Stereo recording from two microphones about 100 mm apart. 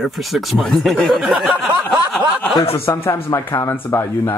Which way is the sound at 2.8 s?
25° left (ahead or behind).